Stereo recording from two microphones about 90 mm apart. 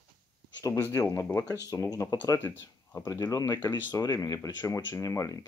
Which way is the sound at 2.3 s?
20° left (ahead or behind).